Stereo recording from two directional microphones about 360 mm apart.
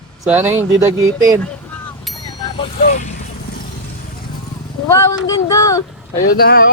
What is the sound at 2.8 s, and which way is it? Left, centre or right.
Vehicle, left.